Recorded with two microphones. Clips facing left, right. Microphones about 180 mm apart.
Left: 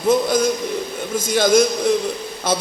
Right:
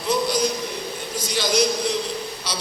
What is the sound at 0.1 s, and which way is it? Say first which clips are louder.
A man's voice: left 5 dB; 50° left (ahead or behind).